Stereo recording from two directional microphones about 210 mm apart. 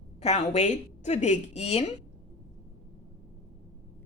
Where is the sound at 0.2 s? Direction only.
30° left (ahead or behind).